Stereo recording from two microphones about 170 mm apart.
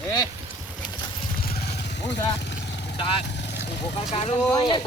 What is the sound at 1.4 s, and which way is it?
Vehicle, 70° left (ahead or behind).